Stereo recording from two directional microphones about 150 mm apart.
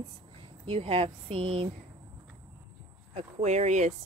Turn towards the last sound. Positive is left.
turn(degrees=-50)  # may be behind; listen again after turning